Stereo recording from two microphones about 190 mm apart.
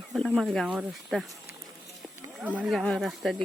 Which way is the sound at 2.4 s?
10° right (ahead or behind).